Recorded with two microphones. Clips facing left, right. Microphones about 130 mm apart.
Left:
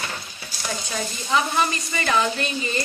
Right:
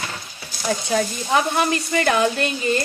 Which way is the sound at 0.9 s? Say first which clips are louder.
Right 4 dB; 65° right (ahead or behind).